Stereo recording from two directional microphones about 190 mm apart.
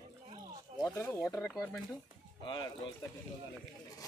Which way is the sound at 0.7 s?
15° left (ahead or behind).